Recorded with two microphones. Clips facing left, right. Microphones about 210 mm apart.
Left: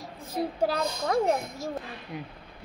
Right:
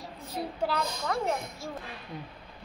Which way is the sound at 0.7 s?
40° left (ahead or behind).